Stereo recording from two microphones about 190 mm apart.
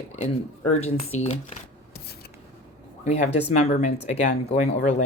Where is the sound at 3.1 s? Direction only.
35° left (ahead or behind).